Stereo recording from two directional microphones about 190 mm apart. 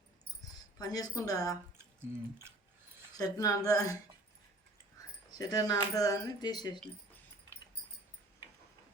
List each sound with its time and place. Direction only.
0.5 s speech: 20° left (ahead or behind)
3.2 s speech: 20° left (ahead or behind)
5.4 s speech: 20° left (ahead or behind)